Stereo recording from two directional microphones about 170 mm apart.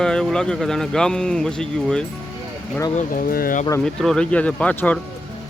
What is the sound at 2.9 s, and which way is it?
Speech, 50° left (ahead or behind).